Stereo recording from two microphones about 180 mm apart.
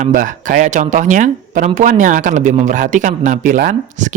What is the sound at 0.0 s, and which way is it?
Speech, 45° right (ahead or behind).